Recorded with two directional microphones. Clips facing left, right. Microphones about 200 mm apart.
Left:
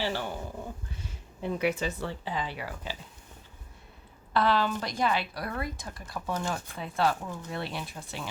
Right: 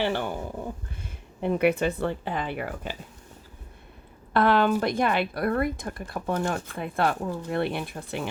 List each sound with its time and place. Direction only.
0.0 s speech: 55° right (ahead or behind)
4.4 s speech: 55° right (ahead or behind)